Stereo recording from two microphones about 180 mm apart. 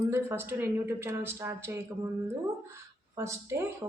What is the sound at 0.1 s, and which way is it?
Speech, 10° right (ahead or behind).